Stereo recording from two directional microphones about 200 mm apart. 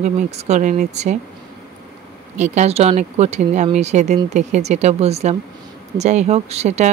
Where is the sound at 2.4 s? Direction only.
35° right (ahead or behind).